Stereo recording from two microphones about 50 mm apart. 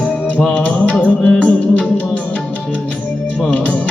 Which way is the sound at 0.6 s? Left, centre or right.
Left.